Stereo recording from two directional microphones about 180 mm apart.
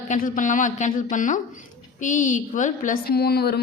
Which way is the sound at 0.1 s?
45° left (ahead or behind).